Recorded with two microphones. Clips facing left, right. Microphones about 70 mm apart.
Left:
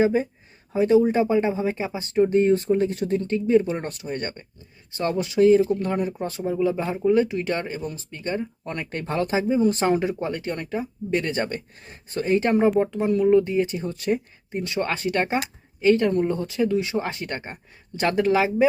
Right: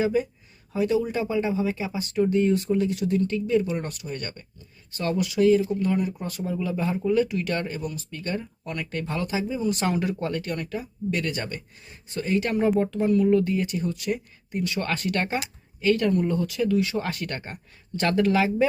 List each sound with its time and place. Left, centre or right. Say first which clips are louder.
0.0 s speech: left 3 dB; left